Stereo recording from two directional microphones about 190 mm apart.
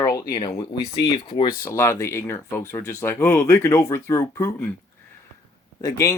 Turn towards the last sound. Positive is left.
turn(degrees=15)  # may be behind; listen again after turning